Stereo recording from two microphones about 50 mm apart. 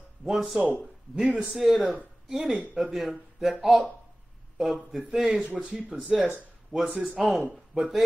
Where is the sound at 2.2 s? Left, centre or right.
Centre.